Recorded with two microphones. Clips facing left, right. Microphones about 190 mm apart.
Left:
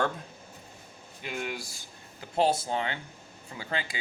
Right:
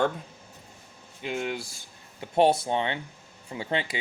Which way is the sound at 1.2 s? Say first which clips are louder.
Right 5 dB; 25° right (ahead or behind).